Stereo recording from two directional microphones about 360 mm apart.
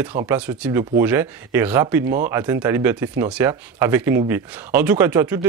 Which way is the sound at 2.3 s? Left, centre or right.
Centre.